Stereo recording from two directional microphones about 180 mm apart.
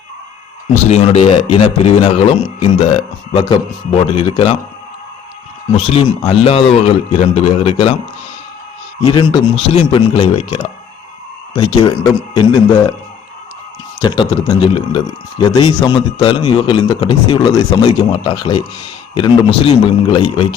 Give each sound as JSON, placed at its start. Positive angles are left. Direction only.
{"t": 0.7, "sound": "a man's voice", "side_deg": 35}
{"t": 5.7, "sound": "a man's voice", "side_deg": 35}
{"t": 9.0, "sound": "a man's voice", "side_deg": 25}
{"t": 14.0, "sound": "a man's voice", "side_deg": 25}